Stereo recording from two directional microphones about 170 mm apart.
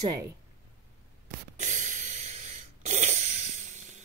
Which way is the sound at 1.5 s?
45° right (ahead or behind).